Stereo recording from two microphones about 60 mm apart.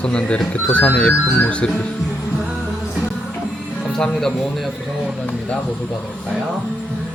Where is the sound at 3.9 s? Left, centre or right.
Centre.